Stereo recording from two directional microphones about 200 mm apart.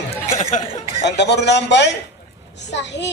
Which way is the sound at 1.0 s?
60° left (ahead or behind).